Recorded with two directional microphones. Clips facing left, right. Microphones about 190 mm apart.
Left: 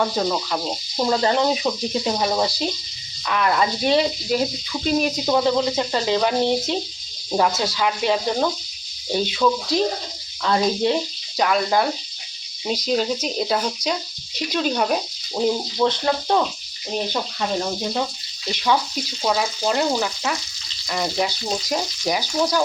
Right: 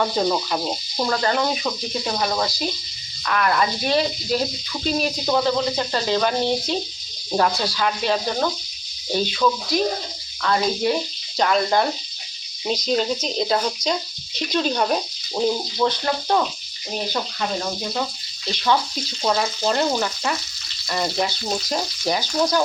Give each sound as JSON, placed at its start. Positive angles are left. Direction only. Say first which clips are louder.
{"t": 0.0, "sound": "speech", "louder": "right 1 dB", "side_deg": -5}
{"t": 0.9, "sound": "speech", "louder": "left 3 dB", "side_deg": 15}
{"t": 11.3, "sound": "frying", "louder": "even", "side_deg": 5}
{"t": 12.6, "sound": "speech", "louder": "even", "side_deg": 5}
{"t": 18.4, "sound": "speech", "louder": "even", "side_deg": 15}
{"t": 19.2, "sound": "frying", "louder": "even", "side_deg": 5}
{"t": 20.9, "sound": "speech", "louder": "even", "side_deg": 5}